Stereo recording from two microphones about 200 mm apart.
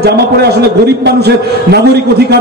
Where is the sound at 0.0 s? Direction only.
55° right (ahead or behind).